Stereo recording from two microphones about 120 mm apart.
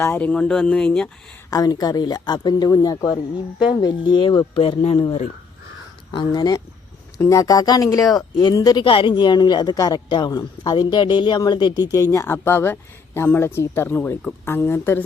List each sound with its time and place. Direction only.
0.0 s speech: 15° left (ahead or behind)
1.5 s speech: 30° left (ahead or behind)
4.5 s speech: 50° left (ahead or behind)
6.1 s speech: 40° left (ahead or behind)
8.8 s speech: 45° left (ahead or behind); by 15.0 s 20° left (ahead or behind)